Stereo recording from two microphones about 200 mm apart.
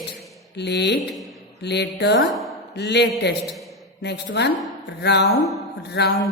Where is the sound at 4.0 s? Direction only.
60° left (ahead or behind).